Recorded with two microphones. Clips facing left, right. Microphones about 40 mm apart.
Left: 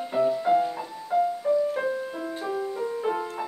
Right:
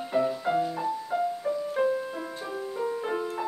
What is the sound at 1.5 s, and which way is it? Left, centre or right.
Music, right.